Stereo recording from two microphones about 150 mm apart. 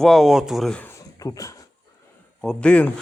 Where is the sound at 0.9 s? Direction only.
20° left (ahead or behind).